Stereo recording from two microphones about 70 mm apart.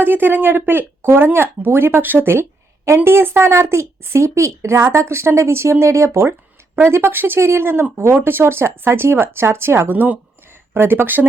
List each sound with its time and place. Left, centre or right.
0.0 s speech: right